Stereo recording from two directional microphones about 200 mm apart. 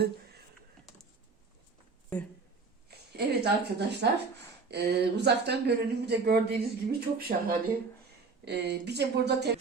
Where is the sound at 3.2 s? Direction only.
55° right (ahead or behind).